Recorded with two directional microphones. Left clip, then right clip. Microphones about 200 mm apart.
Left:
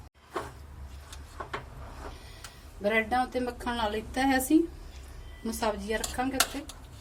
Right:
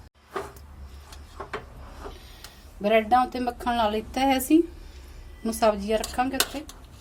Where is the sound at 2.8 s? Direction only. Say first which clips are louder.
Right 6 dB; 45° right (ahead or behind).